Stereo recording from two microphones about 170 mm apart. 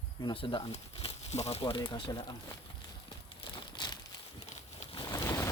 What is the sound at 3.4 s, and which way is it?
Crumpling, 25° left (ahead or behind).